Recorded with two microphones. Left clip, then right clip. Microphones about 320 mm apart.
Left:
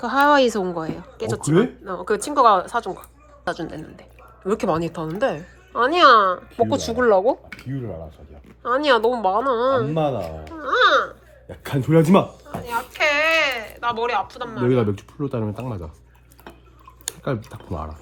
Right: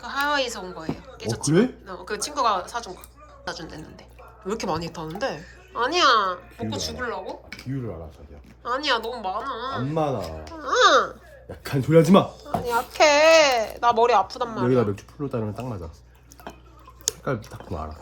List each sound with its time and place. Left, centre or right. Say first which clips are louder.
0.0 s speech: left 8 dB; centre
8.6 s speech: left 7 dB; centre
11.4 s speech: left 2 dB; centre
12.6 s speech: right 2 dB; centre
14.8 s speech: left 1 dB; centre
17.2 s speech: left 1 dB; left